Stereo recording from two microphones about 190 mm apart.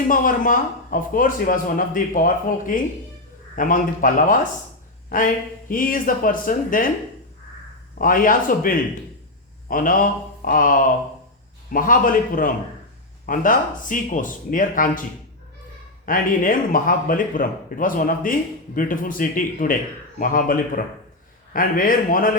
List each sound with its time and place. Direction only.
0.1 s speech: 45° left (ahead or behind)
7.9 s speech: 45° left (ahead or behind)
16.0 s speech: 45° left (ahead or behind)